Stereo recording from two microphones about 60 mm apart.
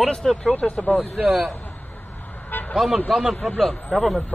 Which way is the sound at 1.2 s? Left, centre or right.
Centre.